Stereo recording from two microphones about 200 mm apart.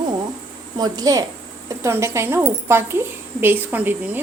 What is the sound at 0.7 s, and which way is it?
A woman's voice, 20° right (ahead or behind).